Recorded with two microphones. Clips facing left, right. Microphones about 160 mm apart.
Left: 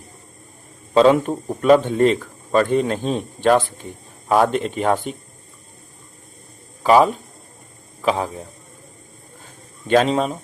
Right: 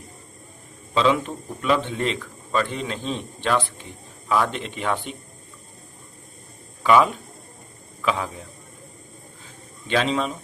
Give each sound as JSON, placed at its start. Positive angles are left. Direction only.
{"t": 0.9, "sound": "speech", "side_deg": 45}
{"t": 6.8, "sound": "a man's voice", "side_deg": 35}
{"t": 9.4, "sound": "a sound", "side_deg": 45}